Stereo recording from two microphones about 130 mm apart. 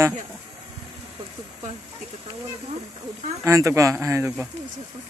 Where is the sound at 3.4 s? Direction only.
25° right (ahead or behind).